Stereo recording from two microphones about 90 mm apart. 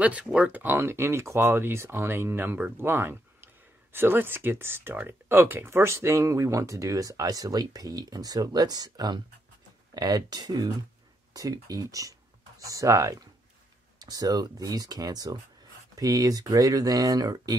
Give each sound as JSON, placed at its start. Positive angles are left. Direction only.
{"t": 0.0, "sound": "speech", "side_deg": -15}